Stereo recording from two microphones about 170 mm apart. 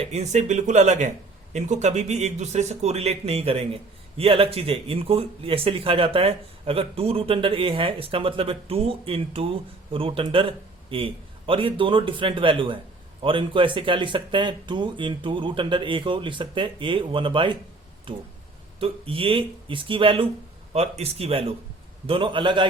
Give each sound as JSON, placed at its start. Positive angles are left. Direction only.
{"t": 0.0, "sound": "speech", "side_deg": -40}